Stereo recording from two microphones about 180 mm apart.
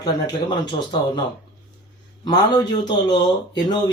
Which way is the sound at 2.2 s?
25° left (ahead or behind).